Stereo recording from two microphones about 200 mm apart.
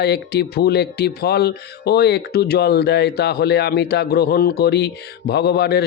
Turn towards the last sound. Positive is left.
turn(degrees=55)  # may be behind; listen again after turning